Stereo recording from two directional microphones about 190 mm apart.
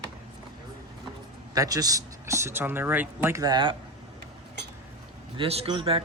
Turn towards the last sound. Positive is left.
turn(degrees=-30)  # may be behind; listen again after turning